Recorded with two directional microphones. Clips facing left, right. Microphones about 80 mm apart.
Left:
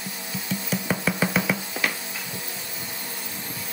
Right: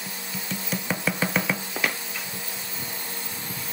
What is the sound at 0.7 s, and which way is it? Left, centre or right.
Music, centre.